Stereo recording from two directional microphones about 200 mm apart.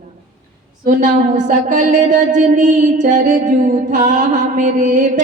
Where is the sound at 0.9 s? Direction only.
40° right (ahead or behind).